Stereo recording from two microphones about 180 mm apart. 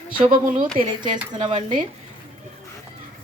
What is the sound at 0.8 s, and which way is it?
Speech, 25° right (ahead or behind).